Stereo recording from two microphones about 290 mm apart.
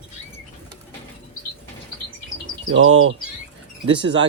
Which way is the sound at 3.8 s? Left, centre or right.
Centre.